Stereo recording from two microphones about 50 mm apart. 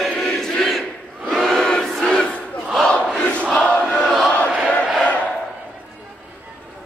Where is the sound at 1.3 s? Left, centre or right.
Centre; by 3.4 s left.